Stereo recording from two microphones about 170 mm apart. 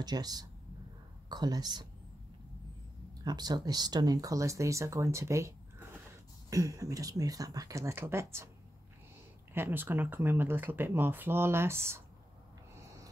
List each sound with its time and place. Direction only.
0.0 s speech: 25° right (ahead or behind)
3.3 s speech: 25° right (ahead or behind)
9.5 s speech: 10° right (ahead or behind)